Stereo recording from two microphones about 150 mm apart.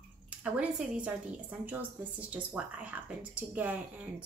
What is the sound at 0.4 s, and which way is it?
Speech, 10° right (ahead or behind).